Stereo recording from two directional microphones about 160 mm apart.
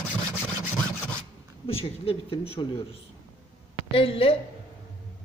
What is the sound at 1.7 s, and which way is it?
A woman's voice, 35° left (ahead or behind).